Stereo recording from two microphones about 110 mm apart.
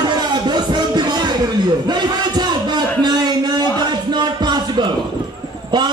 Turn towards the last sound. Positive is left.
turn(degrees=-40)  # may be behind; listen again after turning